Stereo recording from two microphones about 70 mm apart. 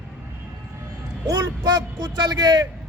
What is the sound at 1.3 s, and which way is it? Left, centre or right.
Speech, right.